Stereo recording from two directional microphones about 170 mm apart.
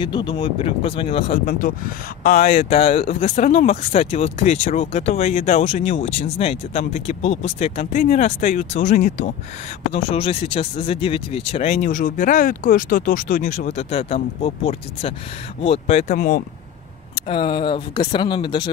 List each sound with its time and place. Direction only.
0.0 s speech: 30° left (ahead or behind)
1.4 s speech: 50° left (ahead or behind)
7.9 s speech: 50° left (ahead or behind)
9.9 s speech: 35° left (ahead or behind)
16.1 s speech: 55° left (ahead or behind)
17.1 s speech: 30° left (ahead or behind)